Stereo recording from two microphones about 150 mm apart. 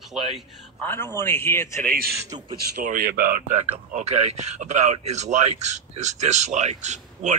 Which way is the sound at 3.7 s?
45° right (ahead or behind).